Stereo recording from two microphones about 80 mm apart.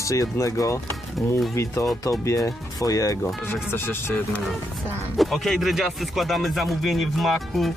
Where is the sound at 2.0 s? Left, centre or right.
Left.